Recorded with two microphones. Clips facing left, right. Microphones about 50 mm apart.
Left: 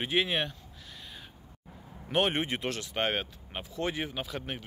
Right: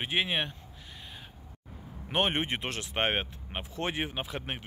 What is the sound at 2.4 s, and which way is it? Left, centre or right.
Speech, right.